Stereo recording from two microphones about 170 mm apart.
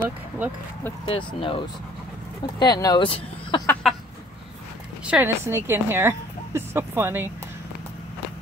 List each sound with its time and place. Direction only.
1.0 s speech: 30° left (ahead or behind)
3.8 s a sound: centre (ahead or behind)
5.0 s a woman's voice: 10° right (ahead or behind)